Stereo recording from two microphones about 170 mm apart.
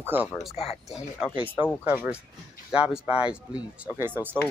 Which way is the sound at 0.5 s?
35° left (ahead or behind).